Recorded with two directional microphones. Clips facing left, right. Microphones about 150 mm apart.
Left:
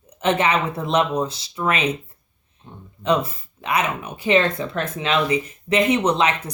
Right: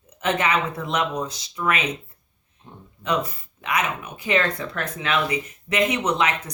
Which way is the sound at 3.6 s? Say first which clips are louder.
Left 3 dB; 30° left (ahead or behind).